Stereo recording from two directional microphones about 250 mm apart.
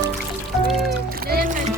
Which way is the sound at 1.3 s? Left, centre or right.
Right.